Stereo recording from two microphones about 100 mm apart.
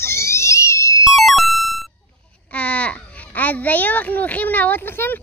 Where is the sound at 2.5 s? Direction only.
10° left (ahead or behind).